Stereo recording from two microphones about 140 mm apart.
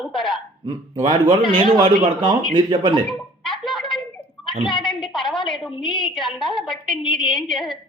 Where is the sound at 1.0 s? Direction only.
35° right (ahead or behind).